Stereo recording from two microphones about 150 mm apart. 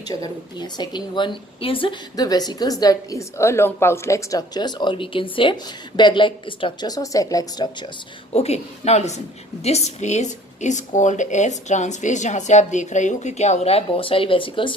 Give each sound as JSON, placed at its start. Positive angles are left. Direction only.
{"t": 0.0, "sound": "a woman's voice", "side_deg": 25}
{"t": 8.3, "sound": "a woman's voice", "side_deg": 45}